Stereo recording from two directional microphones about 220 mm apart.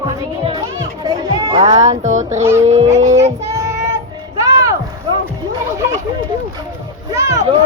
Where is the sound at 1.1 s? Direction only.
15° right (ahead or behind).